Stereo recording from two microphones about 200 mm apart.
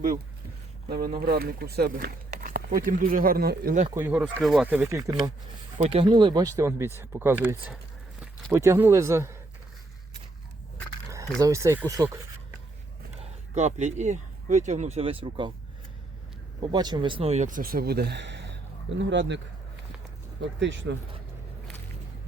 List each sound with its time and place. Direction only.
0.9 s speech: 50° right (ahead or behind)
3.9 s speech: 10° right (ahead or behind)
5.7 s speech: 30° right (ahead or behind); by 9.4 s 15° right (ahead or behind)
11.1 s speech: 15° right (ahead or behind)
13.1 s speech: 35° right (ahead or behind)
16.6 s speech: 20° right (ahead or behind); by 19.4 s 65° right (ahead or behind)
20.6 s speech: 65° right (ahead or behind)